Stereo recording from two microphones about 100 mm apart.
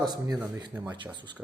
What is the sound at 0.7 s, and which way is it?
Speech, 15° right (ahead or behind).